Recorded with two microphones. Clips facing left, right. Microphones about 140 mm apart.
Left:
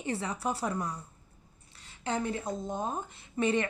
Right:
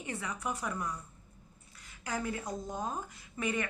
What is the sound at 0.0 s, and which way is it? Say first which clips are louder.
A woman's voice: left 5 dB; 30° left (ahead or behind).